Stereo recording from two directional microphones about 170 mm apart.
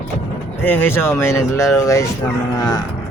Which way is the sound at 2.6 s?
20° left (ahead or behind).